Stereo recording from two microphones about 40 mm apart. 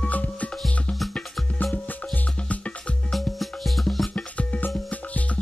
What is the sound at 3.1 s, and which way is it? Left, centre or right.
Music, centre.